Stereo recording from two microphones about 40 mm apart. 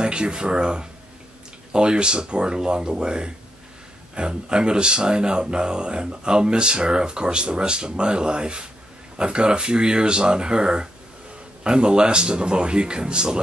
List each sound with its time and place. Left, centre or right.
0.0 s speech: right